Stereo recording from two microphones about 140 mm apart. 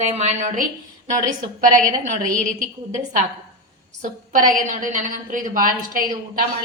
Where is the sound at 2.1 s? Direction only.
65° right (ahead or behind).